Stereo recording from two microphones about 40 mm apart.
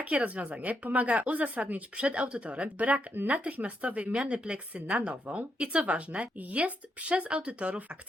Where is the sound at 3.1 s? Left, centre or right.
Right.